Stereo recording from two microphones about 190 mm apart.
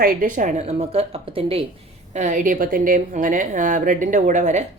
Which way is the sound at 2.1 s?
40° right (ahead or behind).